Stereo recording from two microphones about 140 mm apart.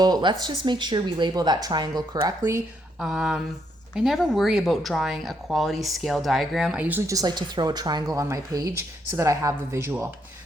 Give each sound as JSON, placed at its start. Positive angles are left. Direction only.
{"t": 0.0, "sound": "speech", "side_deg": -30}
{"t": 3.0, "sound": "speech", "side_deg": -5}
{"t": 7.1, "sound": "speech", "side_deg": -30}